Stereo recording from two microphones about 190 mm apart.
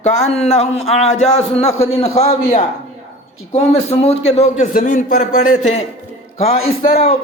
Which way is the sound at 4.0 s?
35° left (ahead or behind).